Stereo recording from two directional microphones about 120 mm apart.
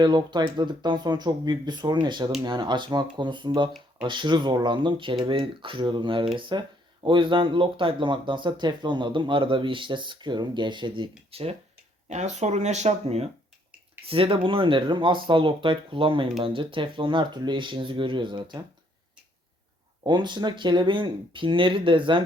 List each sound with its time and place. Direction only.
0.0 s speech: 35° right (ahead or behind)
11.3 s speech: 55° right (ahead or behind)
12.0 s speech: 75° right (ahead or behind); by 18.6 s 40° right (ahead or behind)
20.1 s speech: 40° right (ahead or behind)